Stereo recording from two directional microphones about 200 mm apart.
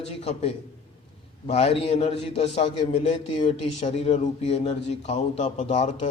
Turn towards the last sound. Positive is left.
turn(degrees=35)  # may be behind; listen again after turning